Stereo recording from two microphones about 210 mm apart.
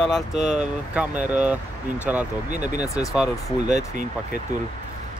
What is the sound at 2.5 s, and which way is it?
Speech, 35° right (ahead or behind).